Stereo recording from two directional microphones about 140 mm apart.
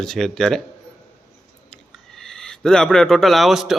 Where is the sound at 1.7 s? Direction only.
5° left (ahead or behind).